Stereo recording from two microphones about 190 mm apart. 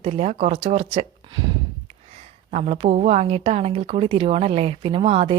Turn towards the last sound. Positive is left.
turn(degrees=-30)  # may be behind; listen again after turning